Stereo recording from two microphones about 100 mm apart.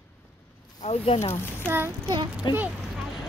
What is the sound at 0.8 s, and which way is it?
Speech, 90° left.